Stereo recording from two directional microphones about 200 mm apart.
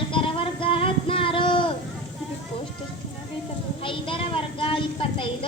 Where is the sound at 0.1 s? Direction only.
25° left (ahead or behind).